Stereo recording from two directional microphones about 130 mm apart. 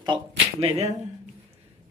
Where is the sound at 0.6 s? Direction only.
55° right (ahead or behind).